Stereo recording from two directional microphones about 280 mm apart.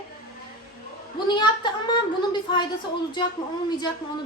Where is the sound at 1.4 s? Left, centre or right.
Centre.